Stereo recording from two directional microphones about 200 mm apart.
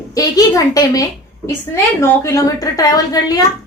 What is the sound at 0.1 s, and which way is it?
A woman's voice, 15° left (ahead or behind).